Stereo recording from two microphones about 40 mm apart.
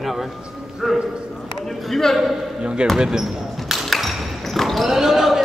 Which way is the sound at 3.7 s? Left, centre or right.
Centre.